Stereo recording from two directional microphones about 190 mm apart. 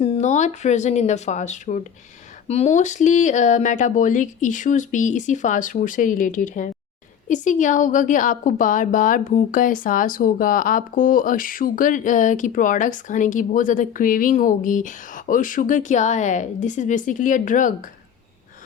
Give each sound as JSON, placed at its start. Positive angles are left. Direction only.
{"t": 0.0, "sound": "a woman's voice", "side_deg": 35}